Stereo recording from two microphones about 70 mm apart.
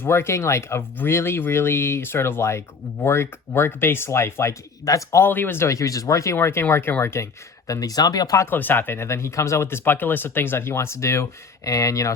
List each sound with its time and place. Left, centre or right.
0.0 s speech: left
4.9 s speech: left
5.2 s speech: left
6.3 s speech: left
7.7 s speech: left
8.4 s speech: left